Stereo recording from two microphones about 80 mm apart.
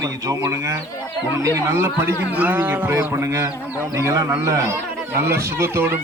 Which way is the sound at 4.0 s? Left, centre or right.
Right.